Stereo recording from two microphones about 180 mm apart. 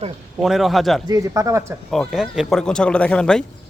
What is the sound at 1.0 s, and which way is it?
Speech, 20° right (ahead or behind).